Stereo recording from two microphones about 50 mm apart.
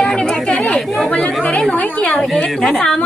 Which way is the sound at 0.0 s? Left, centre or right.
Centre.